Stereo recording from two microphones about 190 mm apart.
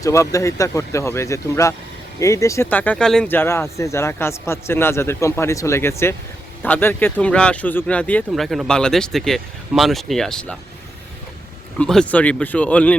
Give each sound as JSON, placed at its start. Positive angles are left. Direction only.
{"t": 0.0, "sound": "speech", "side_deg": 15}
{"t": 11.8, "sound": "speech", "side_deg": 5}